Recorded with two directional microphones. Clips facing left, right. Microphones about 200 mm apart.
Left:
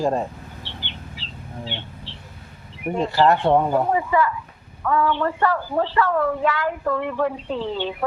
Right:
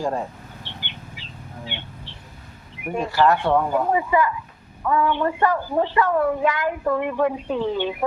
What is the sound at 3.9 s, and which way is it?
A woman's voice, 15° right (ahead or behind).